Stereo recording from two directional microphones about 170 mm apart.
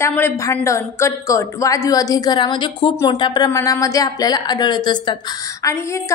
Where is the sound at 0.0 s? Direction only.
15° left (ahead or behind).